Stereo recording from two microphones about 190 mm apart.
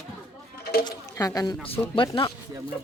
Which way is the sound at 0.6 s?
55° left (ahead or behind).